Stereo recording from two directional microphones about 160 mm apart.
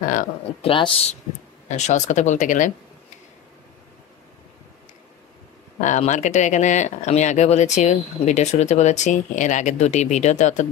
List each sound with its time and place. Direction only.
0.6 s speech: 35° left (ahead or behind)
1.7 s speech: 45° left (ahead or behind)
5.8 s speech: 50° left (ahead or behind)